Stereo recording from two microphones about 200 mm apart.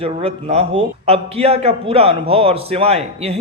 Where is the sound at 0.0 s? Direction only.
30° right (ahead or behind).